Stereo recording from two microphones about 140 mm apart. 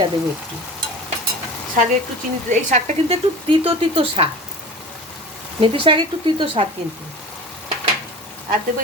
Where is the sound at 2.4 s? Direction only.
50° right (ahead or behind).